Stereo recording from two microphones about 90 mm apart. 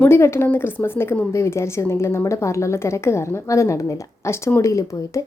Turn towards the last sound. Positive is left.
turn(degrees=35)  # may be behind; listen again after turning